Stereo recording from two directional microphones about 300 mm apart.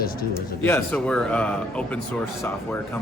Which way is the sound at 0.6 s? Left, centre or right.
Centre.